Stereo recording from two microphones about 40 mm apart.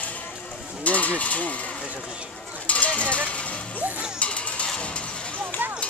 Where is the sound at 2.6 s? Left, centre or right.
Left.